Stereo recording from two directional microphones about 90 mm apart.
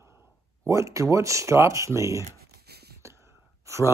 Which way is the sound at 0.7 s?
35° right (ahead or behind).